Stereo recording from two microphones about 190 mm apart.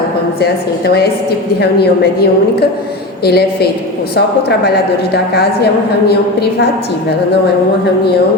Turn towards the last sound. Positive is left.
turn(degrees=60)  # may be behind; listen again after turning